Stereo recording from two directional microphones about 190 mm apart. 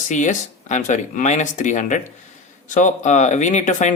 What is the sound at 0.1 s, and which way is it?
A man's voice, 40° left (ahead or behind).